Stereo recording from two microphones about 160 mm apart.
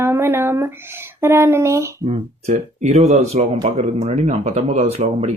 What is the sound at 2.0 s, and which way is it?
Speech, 45° right (ahead or behind).